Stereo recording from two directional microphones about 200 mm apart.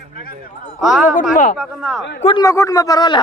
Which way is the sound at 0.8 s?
Centre (ahead or behind).